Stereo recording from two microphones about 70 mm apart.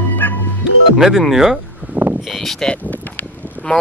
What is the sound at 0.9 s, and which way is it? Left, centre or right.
Speech, centre.